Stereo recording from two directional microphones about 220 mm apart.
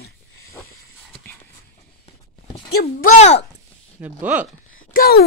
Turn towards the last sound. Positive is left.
turn(degrees=45)  # may be behind; listen again after turning